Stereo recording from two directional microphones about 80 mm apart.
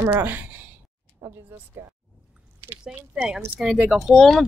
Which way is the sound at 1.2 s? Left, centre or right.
Right.